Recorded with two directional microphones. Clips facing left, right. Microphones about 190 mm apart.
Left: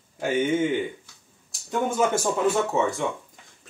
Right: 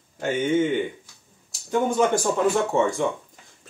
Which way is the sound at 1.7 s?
5° left (ahead or behind).